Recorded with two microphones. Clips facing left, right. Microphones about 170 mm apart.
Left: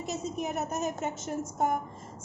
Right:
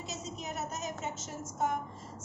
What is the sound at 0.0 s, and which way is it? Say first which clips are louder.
A woman's voice: left 8 dB; 55° left (ahead or behind).